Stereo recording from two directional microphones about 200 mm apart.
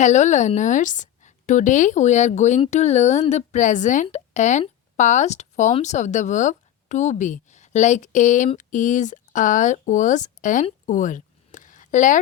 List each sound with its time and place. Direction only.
0.0 s a woman's voice: 35° left (ahead or behind)